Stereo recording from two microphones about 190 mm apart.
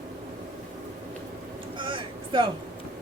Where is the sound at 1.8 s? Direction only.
25° right (ahead or behind).